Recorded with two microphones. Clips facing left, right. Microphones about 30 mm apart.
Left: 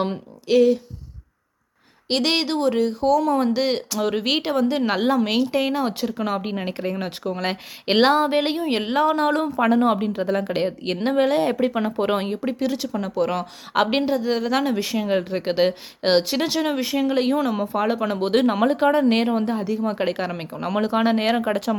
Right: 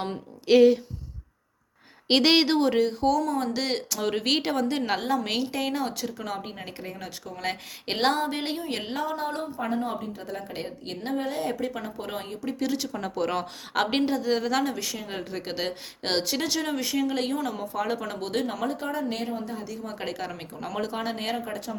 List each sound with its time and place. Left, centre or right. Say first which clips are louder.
0.4 s speech: left 1 dB; centre
2.0 s speech: right 1 dB; centre
3.2 s speech: left 7 dB; centre; by 7.4 s left
8.0 s speech: left 6 dB; left
9.1 s a woman's voice: left 10 dB; left
12.5 s speech: left 4 dB; centre
13.7 s speech: left 5 dB; centre
14.6 s speech: left 7 dB; left
18.3 s speech: left 10 dB; left
19.6 s speech: left 11 dB; left